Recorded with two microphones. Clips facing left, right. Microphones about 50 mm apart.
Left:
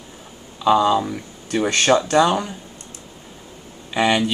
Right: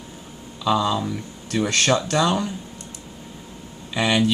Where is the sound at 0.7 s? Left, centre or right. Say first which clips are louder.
Left 5 dB; centre.